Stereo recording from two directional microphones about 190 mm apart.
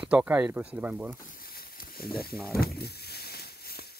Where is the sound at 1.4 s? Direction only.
50° left (ahead or behind).